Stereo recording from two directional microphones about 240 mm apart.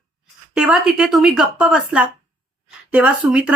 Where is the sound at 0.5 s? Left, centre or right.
Centre.